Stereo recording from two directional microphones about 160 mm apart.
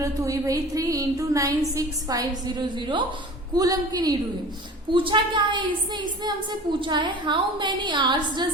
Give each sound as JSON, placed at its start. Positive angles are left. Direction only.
{"t": 0.0, "sound": "a woman's voice", "side_deg": -20}